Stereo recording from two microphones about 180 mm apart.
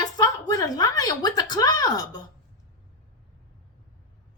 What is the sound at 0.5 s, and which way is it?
Speech, 20° left (ahead or behind).